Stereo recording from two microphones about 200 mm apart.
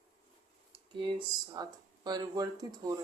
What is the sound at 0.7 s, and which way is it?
Speech, 25° right (ahead or behind).